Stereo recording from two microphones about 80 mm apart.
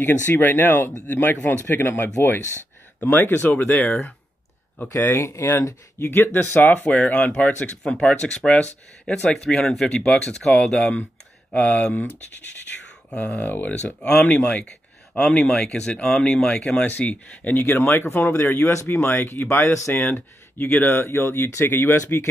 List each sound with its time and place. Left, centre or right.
0.0 s speech: left
5.0 s speech: left